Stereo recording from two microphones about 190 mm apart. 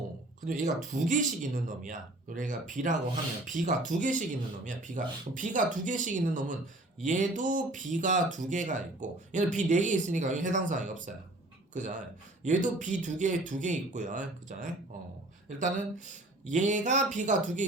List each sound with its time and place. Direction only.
0.4 s speech: 45° right (ahead or behind)